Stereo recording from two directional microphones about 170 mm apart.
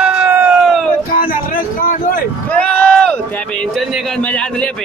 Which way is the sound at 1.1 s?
55° left (ahead or behind).